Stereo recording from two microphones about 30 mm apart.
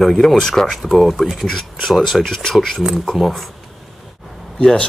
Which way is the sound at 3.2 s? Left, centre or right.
Centre.